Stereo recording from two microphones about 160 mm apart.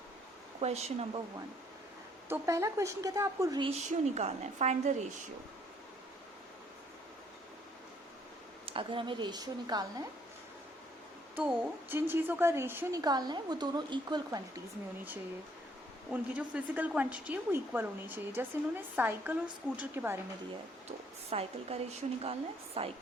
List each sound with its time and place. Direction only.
0.6 s a woman's voice: 40° right (ahead or behind)
2.3 s a woman's voice: 20° right (ahead or behind)
3.6 s a woman's voice: 45° right (ahead or behind)
8.6 s a woman's voice: 35° right (ahead or behind)
11.3 s a woman's voice: 10° right (ahead or behind)
13.0 s a woman's voice: 25° right (ahead or behind)
16.0 s a woman's voice: 10° right (ahead or behind)
21.2 s a woman's voice: 40° right (ahead or behind)